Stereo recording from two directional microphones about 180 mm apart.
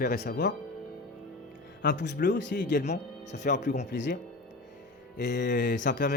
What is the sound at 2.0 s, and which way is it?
Speech, 70° left (ahead or behind).